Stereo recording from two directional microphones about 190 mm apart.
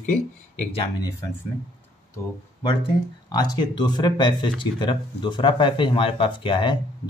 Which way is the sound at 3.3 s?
20° left (ahead or behind).